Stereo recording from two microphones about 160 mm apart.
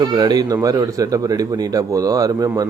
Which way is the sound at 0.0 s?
25° right (ahead or behind).